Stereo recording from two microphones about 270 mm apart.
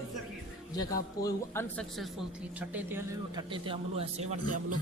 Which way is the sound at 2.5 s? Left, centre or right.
Centre.